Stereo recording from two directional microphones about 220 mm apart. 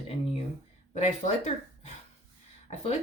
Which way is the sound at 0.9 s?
30° left (ahead or behind).